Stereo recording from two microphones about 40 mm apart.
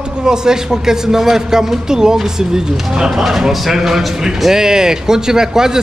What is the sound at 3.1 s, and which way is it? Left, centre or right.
A man's voice, centre.